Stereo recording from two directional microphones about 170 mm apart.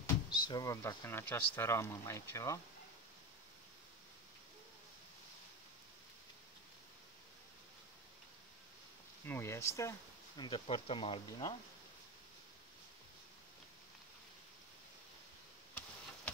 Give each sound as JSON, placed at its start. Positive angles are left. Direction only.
{"t": 0.0, "sound": "speech", "side_deg": 25}
{"t": 9.2, "sound": "speech", "side_deg": 15}